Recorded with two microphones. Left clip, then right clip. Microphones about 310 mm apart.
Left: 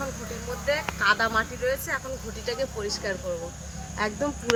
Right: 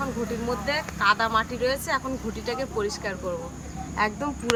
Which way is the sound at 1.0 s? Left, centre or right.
Right.